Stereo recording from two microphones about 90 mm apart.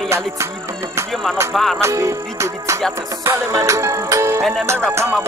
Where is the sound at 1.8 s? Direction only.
30° right (ahead or behind).